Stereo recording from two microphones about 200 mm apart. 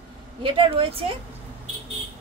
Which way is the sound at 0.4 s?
25° right (ahead or behind).